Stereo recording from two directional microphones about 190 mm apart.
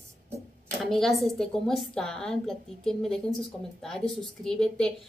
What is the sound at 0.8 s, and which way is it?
A woman's voice, centre (ahead or behind).